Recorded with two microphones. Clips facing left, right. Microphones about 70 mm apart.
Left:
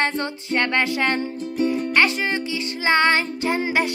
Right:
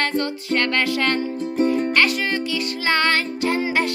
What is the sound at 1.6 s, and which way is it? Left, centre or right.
Music, right.